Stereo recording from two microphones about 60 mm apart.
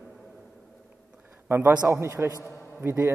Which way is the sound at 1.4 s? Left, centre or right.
Right.